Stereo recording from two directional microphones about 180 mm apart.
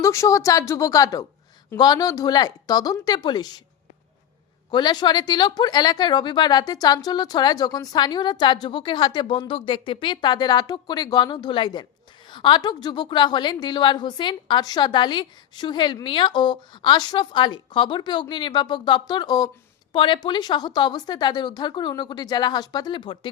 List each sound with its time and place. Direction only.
0.0 s a woman's voice: 15° left (ahead or behind)
4.7 s a woman's voice: 25° left (ahead or behind)